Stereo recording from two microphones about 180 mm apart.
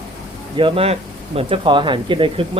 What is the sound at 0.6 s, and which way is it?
Speech, 30° right (ahead or behind).